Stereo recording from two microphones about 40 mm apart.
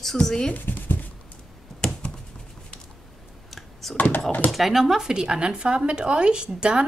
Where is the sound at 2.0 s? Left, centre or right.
Left.